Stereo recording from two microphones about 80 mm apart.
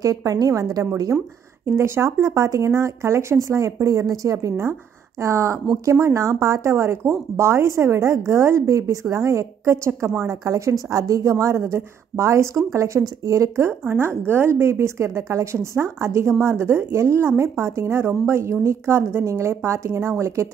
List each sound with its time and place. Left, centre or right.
0.0 s a woman's voice: right
1.7 s a woman's voice: right
13.7 s a woman's voice: right